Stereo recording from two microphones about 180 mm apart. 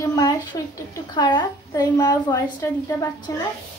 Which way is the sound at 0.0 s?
20° left (ahead or behind).